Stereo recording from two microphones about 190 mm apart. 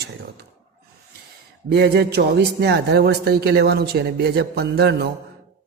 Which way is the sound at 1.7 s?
60° right (ahead or behind).